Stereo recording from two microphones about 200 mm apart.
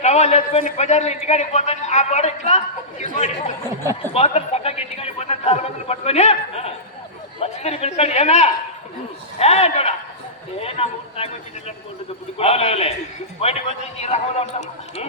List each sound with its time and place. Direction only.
0.0 s a man's voice: 35° left (ahead or behind)
12.4 s a man's voice: 30° left (ahead or behind)